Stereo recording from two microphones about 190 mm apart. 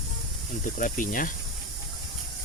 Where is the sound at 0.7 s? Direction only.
45° left (ahead or behind).